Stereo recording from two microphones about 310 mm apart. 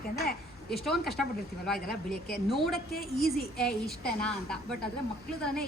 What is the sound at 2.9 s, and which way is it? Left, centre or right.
Speech, left.